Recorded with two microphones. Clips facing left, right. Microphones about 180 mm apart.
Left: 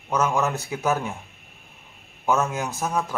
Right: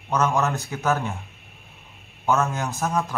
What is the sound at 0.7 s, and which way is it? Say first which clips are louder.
Speech: even; 15° left (ahead or behind).